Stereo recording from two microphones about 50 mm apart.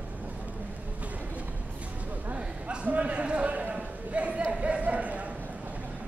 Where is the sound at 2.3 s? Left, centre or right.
Right.